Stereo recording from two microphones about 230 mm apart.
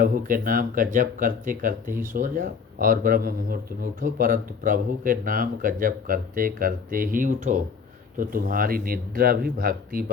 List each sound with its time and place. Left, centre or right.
0.0 s speech: right